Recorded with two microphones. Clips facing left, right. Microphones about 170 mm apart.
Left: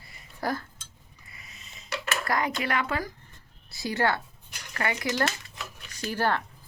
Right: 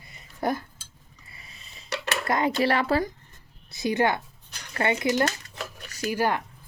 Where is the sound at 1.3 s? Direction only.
30° right (ahead or behind).